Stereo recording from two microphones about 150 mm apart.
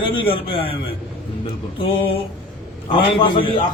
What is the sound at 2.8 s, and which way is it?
Speech, 35° left (ahead or behind).